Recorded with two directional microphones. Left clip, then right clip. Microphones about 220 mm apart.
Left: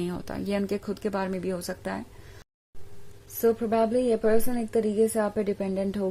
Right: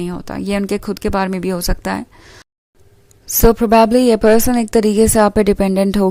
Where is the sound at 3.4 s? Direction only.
45° right (ahead or behind).